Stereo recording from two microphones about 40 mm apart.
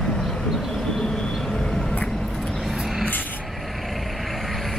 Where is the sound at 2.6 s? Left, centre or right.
Centre.